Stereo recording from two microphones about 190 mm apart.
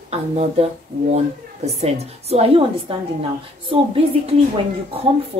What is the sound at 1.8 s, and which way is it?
A woman's voice, 35° right (ahead or behind).